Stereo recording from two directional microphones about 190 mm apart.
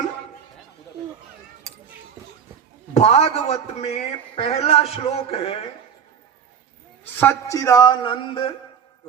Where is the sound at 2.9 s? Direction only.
35° left (ahead or behind).